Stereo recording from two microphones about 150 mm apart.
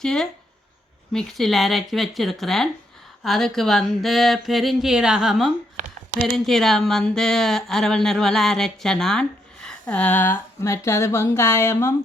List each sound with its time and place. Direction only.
0.0 s speech: 5° left (ahead or behind)
5.8 s a sound: 50° right (ahead or behind)
6.1 s speech: centre (ahead or behind); by 11.9 s 20° left (ahead or behind)